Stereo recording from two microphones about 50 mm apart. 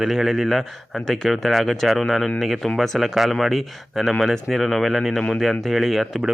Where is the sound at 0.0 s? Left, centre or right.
Centre.